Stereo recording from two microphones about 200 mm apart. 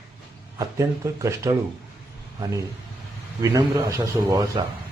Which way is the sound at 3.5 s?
15° right (ahead or behind).